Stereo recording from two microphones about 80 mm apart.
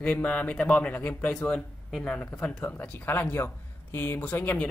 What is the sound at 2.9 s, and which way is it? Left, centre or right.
Speech, left.